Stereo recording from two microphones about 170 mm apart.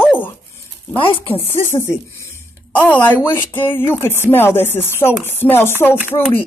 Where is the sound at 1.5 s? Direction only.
15° left (ahead or behind).